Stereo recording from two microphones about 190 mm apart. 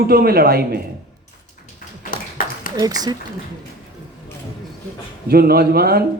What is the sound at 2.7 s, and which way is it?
Speech, 20° right (ahead or behind).